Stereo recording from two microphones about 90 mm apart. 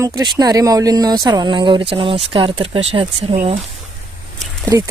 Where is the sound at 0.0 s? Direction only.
40° right (ahead or behind); by 3.5 s 80° right.